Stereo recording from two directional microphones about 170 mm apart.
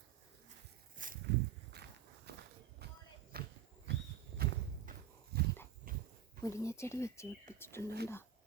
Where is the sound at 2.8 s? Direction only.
75° right (ahead or behind).